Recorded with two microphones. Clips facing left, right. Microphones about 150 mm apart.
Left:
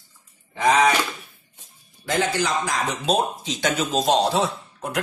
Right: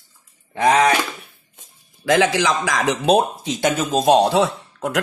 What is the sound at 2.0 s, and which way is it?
Speech, 90° right.